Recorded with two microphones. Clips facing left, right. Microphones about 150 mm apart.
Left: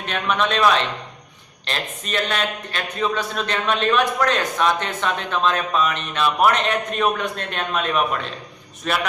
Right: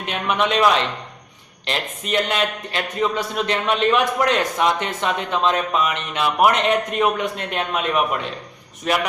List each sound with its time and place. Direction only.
0.0 s a man's voice: 15° right (ahead or behind)